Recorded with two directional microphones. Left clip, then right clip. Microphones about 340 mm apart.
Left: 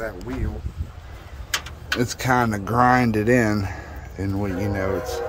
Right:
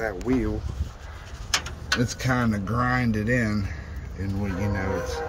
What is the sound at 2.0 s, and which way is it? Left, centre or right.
Speech, centre.